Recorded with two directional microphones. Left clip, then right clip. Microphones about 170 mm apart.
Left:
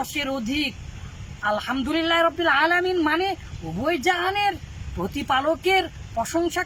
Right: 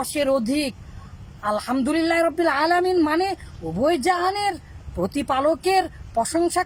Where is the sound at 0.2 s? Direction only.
30° right (ahead or behind).